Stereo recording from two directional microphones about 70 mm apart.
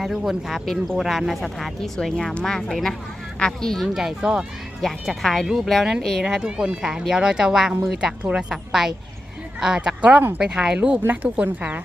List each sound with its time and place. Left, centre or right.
0.0 s speech: centre
3.9 s speech: centre
4.8 s speech: centre
6.2 s speech: centre
10.1 s speech: right
10.3 s speech: centre